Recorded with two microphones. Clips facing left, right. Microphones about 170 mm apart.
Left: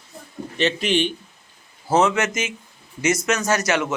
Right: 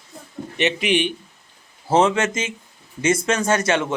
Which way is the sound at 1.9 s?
25° right (ahead or behind).